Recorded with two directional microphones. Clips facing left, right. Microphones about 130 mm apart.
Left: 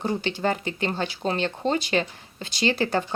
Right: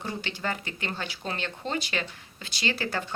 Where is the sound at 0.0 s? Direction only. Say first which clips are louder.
Left 8 dB; 30° left (ahead or behind).